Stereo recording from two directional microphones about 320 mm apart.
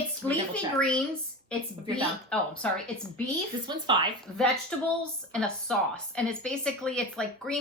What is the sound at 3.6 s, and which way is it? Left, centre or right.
Speech, centre.